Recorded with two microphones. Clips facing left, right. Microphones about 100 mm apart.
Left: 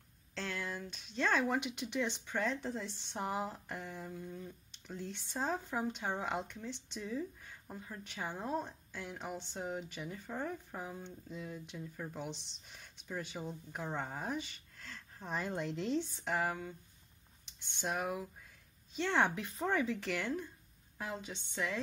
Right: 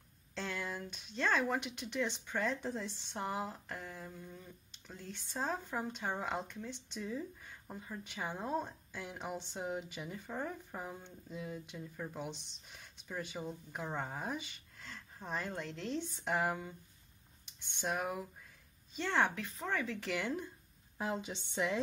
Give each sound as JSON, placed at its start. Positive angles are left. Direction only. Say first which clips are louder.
{"t": 0.3, "sound": "speech", "louder": "even", "side_deg": -5}
{"t": 3.3, "sound": "speech", "louder": "left 1 dB", "side_deg": 5}
{"t": 15.5, "sound": "speech", "louder": "left 4 dB", "side_deg": 10}
{"t": 16.0, "sound": "speech", "louder": "even", "side_deg": -5}
{"t": 17.7, "sound": "speech", "louder": "even", "side_deg": 0}
{"t": 19.2, "sound": "speech", "louder": "left 2 dB", "side_deg": 15}
{"t": 19.9, "sound": "speech", "louder": "left 1 dB", "side_deg": 0}
{"t": 21.0, "sound": "a woman's voice", "louder": "right 4 dB", "side_deg": -20}